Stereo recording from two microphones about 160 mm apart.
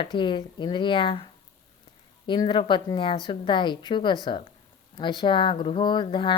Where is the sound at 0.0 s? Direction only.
30° left (ahead or behind).